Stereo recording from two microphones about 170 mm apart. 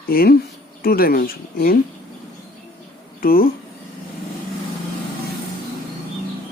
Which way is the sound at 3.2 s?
60° left (ahead or behind).